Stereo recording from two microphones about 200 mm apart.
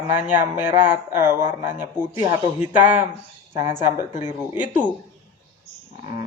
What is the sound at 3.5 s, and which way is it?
Speech, 25° right (ahead or behind).